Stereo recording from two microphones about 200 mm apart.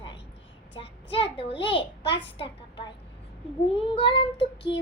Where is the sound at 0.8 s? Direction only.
25° left (ahead or behind).